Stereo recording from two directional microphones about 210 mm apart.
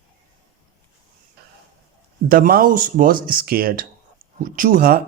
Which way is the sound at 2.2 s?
45° right (ahead or behind).